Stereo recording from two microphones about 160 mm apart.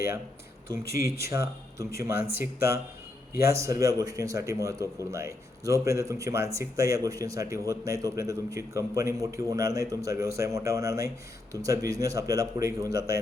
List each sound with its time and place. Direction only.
0.7 s a man's voice: 20° right (ahead or behind)